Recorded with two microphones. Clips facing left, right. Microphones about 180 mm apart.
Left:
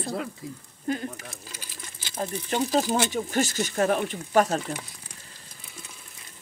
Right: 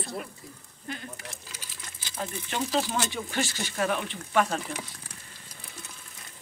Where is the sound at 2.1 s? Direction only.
40° left (ahead or behind).